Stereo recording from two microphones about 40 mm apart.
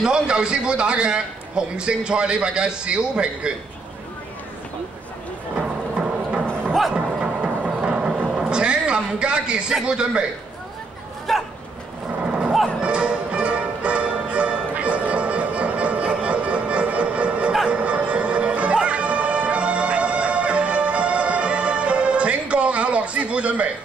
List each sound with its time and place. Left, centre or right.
0.0 s a man's voice: right
5.6 s music: right
6.7 s music: centre
7.2 s a sound: right
9.8 s a man's voice: right
11.3 s dog: centre
12.3 s a sound: right
12.8 s music: right